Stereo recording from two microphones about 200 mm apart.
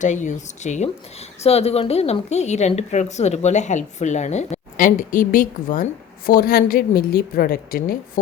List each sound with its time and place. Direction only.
0.0 s speech: 40° left (ahead or behind)